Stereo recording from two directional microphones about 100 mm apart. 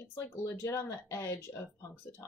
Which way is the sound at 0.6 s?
30° left (ahead or behind).